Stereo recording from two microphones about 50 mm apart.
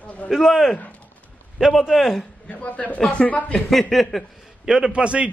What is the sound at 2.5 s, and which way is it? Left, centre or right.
A man's voice, left.